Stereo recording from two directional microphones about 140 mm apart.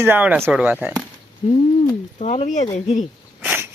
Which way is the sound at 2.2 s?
55° left (ahead or behind).